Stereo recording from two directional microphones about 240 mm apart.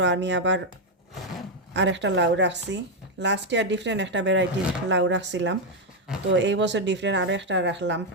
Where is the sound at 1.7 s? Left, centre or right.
Right.